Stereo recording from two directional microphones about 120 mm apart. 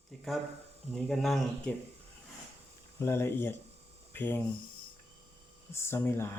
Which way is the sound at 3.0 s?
20° left (ahead or behind).